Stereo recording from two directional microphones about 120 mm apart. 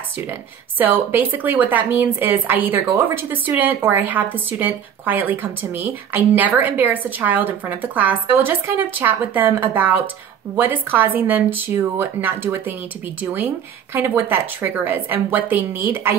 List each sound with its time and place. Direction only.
0.3 s speech: 15° right (ahead or behind)
13.9 s speech: 15° right (ahead or behind)